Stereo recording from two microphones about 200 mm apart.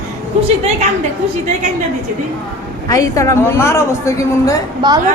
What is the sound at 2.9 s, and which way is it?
A woman's voice, 15° left (ahead or behind).